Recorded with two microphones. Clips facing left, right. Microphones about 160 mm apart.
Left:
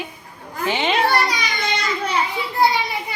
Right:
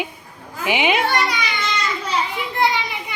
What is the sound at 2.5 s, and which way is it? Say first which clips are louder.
Children playing: left 2 dB; 35° left (ahead or behind).